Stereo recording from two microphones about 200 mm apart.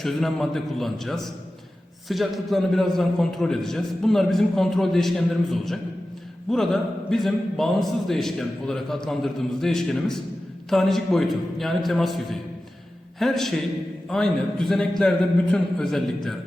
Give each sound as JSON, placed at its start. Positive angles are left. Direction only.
{"t": 0.0, "sound": "a man's voice", "side_deg": 0}